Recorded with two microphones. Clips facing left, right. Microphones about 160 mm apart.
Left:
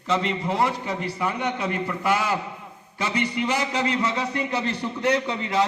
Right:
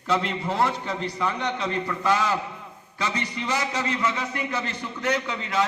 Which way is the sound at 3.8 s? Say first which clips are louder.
Left 2 dB; 30° left (ahead or behind).